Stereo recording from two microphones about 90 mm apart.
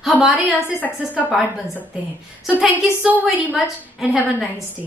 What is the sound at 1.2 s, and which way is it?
Speech, centre (ahead or behind).